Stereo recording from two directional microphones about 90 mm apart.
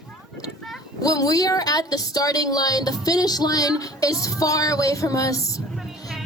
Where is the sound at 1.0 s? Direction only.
40° left (ahead or behind).